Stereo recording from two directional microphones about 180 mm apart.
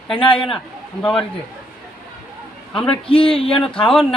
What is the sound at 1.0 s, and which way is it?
Speech, 5° left (ahead or behind).